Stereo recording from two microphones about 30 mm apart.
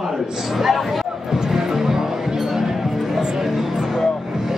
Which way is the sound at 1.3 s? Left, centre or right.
Centre.